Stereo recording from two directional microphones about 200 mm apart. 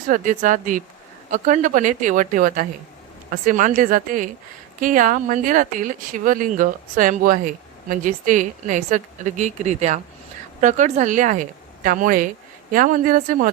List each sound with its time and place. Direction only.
0.1 s a woman's voice: 40° right (ahead or behind)